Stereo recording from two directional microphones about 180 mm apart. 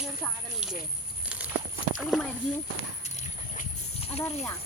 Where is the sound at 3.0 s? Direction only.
40° left (ahead or behind).